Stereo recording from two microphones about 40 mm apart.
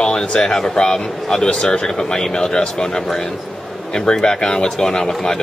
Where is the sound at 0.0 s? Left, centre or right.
Left.